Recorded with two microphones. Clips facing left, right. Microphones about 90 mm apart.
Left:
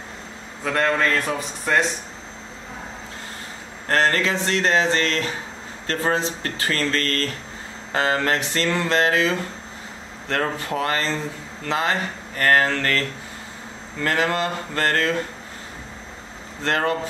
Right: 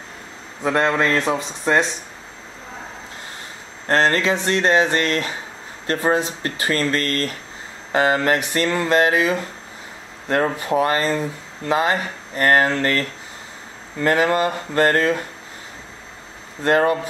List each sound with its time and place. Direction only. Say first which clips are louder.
0.7 s speech: right 2 dB; 20° right (ahead or behind)
3.8 s speech: right 2 dB; 20° right (ahead or behind)
14.0 s speech: right 4 dB; 15° right (ahead or behind)
16.6 s speech: right 6 dB; 20° right (ahead or behind)